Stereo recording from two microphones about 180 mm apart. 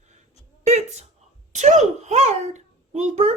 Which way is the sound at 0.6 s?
40° right (ahead or behind).